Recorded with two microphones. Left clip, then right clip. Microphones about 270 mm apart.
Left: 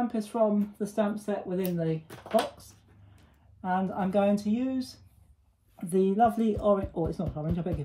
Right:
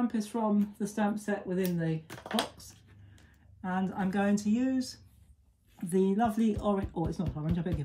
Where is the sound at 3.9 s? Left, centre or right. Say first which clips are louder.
Left 5 dB; centre.